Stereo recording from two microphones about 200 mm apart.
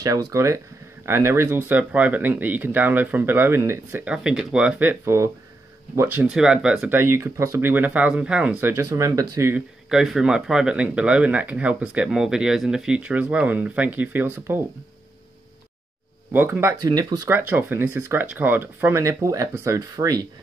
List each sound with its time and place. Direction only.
0.0 s speech: 15° right (ahead or behind)
9.8 s speech: centre (ahead or behind)
16.3 s speech: 10° right (ahead or behind)